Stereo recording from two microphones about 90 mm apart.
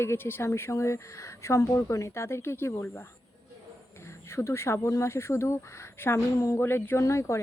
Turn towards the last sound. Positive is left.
turn(degrees=35)  # may be behind; listen again after turning